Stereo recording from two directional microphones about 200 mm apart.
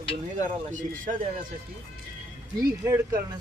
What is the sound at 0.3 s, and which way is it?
Speech, 40° right (ahead or behind).